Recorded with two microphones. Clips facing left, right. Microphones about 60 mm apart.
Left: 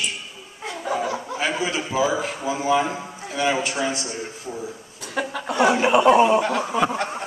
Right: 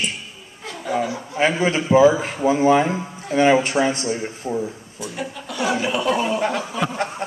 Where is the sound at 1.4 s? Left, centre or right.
Right.